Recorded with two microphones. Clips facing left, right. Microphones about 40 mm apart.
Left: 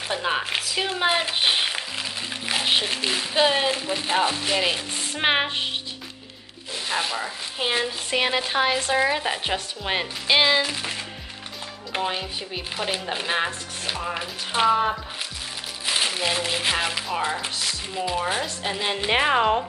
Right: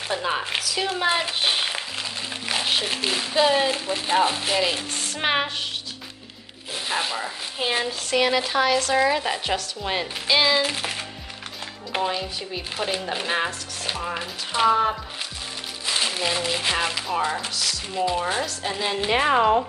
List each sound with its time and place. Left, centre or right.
0.1 s a woman's voice: centre
1.3 s music: centre
2.8 s speech: centre
3.3 s a woman's voice: centre
3.7 s speech: centre
4.6 s a woman's voice: centre
6.9 s speech: centre
8.1 s speech: centre
8.9 s a woman's voice: centre
10.6 s speech: centre
12.2 s speech: centre
15.8 s music: centre
16.1 s speech: centre
18.4 s a woman's voice: centre